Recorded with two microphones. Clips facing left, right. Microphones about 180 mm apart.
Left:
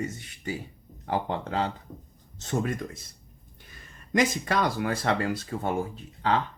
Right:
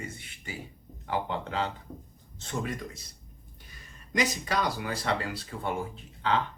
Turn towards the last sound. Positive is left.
turn(degrees=40)  # may be behind; listen again after turning